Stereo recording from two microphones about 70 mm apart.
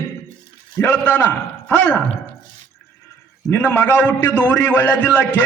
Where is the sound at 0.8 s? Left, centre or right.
Left.